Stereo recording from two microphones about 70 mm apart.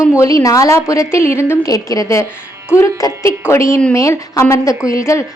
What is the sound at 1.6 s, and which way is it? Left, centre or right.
A woman's voice, left.